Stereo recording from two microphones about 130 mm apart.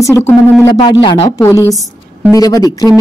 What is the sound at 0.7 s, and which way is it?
Speech, 35° left (ahead or behind).